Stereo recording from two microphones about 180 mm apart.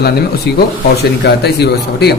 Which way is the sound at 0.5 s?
65° left (ahead or behind).